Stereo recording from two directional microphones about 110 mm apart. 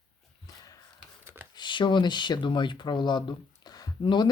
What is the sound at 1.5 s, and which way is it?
Speech, 45° left (ahead or behind).